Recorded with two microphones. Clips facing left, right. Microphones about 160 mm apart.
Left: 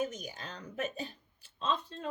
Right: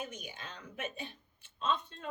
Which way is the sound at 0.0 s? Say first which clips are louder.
Left 7 dB; 40° left (ahead or behind).